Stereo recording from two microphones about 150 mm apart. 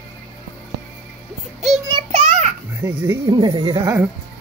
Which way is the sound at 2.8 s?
20° right (ahead or behind).